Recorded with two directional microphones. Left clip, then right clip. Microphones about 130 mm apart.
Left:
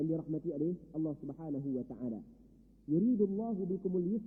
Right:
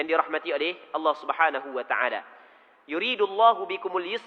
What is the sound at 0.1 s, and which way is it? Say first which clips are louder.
A man's voice: right 13 dB; 20° left (ahead or behind).